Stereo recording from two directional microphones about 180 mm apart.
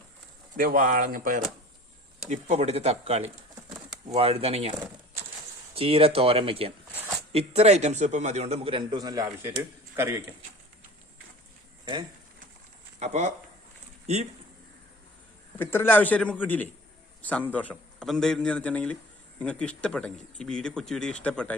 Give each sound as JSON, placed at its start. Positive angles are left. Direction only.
{"t": 0.5, "sound": "speech", "side_deg": -50}
{"t": 2.3, "sound": "a man's voice", "side_deg": -40}
{"t": 5.7, "sound": "a man's voice", "side_deg": -30}
{"t": 13.0, "sound": "a man's voice", "side_deg": -40}
{"t": 15.5, "sound": "a man's voice", "side_deg": 10}